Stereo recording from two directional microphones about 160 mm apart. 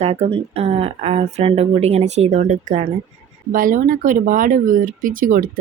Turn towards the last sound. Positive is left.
turn(degrees=-55)  # may be behind; listen again after turning